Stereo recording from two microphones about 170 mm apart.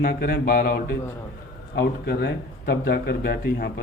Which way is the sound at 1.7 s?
65° left (ahead or behind).